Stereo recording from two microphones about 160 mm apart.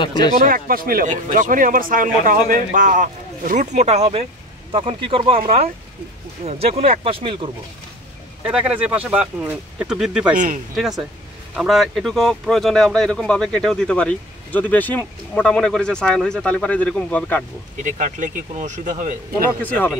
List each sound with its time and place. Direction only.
0.5 s speech: 65° right (ahead or behind); by 5.4 s 35° right (ahead or behind)
6.4 s speech: 40° right (ahead or behind)
8.5 s speech: 5° right (ahead or behind)
10.3 s speech: 55° right (ahead or behind)
10.8 s speech: centre (ahead or behind)
17.8 s speech: 50° right (ahead or behind)
19.6 s speech: 10° left (ahead or behind)